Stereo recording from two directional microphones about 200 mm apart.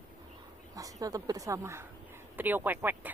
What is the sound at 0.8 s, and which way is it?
Speech, 15° right (ahead or behind).